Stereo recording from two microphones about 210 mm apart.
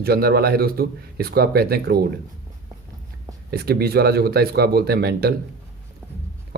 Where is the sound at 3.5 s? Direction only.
45° right (ahead or behind).